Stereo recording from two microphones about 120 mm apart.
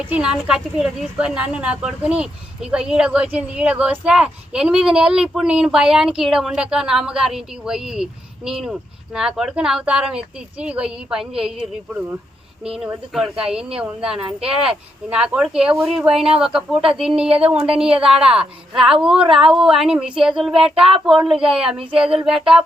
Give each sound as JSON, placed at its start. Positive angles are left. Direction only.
{"t": 0.0, "sound": "speech", "side_deg": -10}
{"t": 12.6, "sound": "speech", "side_deg": -5}
{"t": 17.2, "sound": "speech", "side_deg": -55}
{"t": 17.9, "sound": "speech", "side_deg": -5}